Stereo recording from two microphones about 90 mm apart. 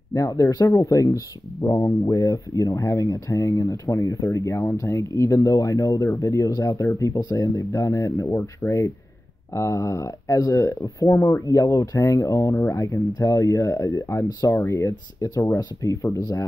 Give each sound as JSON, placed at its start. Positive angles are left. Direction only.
{"t": 0.1, "sound": "speech", "side_deg": 35}